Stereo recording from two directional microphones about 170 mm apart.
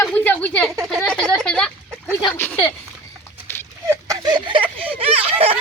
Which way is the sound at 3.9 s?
20° right (ahead or behind).